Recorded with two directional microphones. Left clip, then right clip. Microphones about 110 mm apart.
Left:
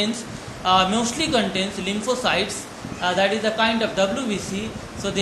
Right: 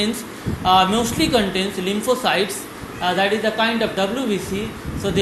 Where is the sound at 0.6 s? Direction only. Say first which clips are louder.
Right 3 dB; 30° right (ahead or behind).